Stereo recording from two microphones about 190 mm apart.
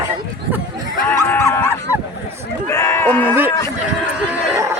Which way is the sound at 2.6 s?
15° left (ahead or behind).